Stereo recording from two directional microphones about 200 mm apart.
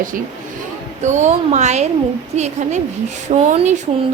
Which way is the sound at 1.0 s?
35° right (ahead or behind).